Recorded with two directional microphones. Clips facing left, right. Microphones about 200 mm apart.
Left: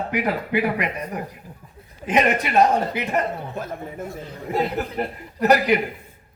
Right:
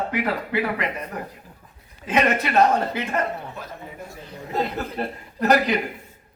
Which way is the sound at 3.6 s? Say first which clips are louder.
Left 6 dB; 50° left (ahead or behind).